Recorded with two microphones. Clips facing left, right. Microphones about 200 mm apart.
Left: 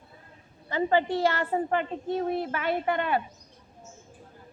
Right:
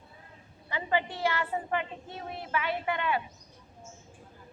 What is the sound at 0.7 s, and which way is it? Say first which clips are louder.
A woman's voice: left 7 dB; 45° left (ahead or behind).